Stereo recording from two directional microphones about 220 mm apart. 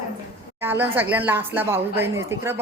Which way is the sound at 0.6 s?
10° right (ahead or behind).